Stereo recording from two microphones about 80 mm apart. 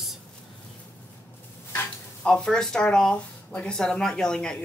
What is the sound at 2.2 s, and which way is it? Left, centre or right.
Speech, centre.